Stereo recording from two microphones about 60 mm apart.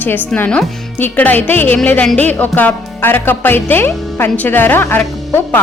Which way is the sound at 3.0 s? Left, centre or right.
Left.